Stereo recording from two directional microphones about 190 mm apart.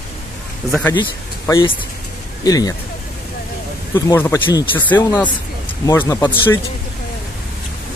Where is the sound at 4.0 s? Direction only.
15° left (ahead or behind).